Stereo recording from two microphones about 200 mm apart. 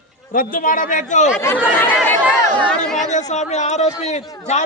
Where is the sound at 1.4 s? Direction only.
10° left (ahead or behind).